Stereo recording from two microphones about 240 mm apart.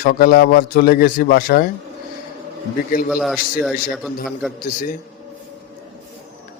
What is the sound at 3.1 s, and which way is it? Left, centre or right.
Speech, centre.